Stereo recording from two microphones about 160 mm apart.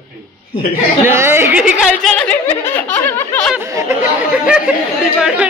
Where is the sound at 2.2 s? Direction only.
10° left (ahead or behind).